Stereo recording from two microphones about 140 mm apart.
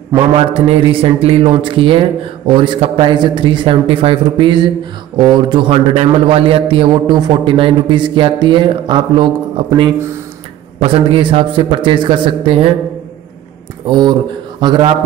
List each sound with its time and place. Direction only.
0.6 s a man's voice: 45° right (ahead or behind)
13.8 s a man's voice: 30° right (ahead or behind)